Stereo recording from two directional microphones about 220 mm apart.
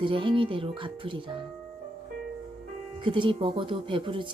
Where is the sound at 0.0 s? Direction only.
20° right (ahead or behind).